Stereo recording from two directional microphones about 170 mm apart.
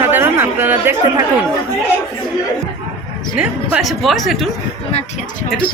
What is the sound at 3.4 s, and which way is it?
A woman's voice, 5° right (ahead or behind).